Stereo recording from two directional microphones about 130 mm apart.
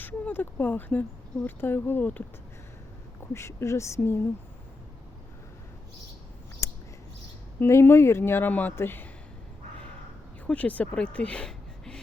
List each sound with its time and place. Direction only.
0.0 s speech: 15° left (ahead or behind)
3.3 s speech: 20° left (ahead or behind)
6.6 s a sound: 20° left (ahead or behind)
7.6 s speech: 20° left (ahead or behind)
10.4 s speech: 10° left (ahead or behind)